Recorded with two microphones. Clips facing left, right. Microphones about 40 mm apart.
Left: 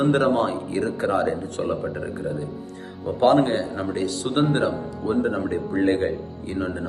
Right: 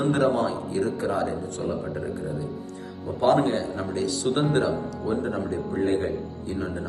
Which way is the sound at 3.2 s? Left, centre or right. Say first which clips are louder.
Left 3 dB; left.